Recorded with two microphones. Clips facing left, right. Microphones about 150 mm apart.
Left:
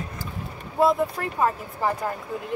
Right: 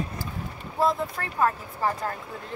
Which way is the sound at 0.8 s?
15° left (ahead or behind).